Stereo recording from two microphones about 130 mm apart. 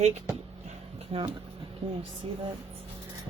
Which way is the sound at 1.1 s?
50° right (ahead or behind).